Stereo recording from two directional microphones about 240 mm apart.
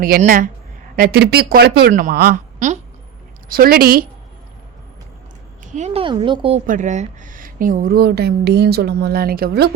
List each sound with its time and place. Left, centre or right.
0.0 s a woman's voice: right
5.7 s speech: right
6.7 s speech: right